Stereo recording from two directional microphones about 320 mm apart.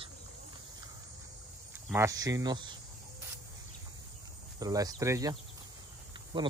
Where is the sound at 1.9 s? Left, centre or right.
Centre.